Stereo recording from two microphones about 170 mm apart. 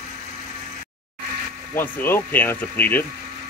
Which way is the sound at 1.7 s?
10° left (ahead or behind).